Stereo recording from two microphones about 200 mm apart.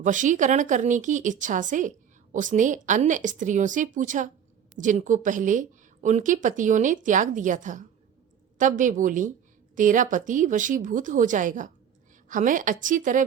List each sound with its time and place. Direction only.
0.0 s a woman's voice: 40° right (ahead or behind)